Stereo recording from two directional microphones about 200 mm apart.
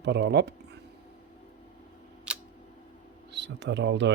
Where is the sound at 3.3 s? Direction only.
60° right (ahead or behind).